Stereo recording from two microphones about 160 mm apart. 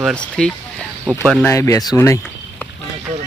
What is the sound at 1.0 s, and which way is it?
Speech, 15° right (ahead or behind).